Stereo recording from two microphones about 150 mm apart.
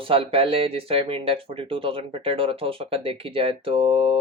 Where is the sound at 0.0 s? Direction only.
40° right (ahead or behind).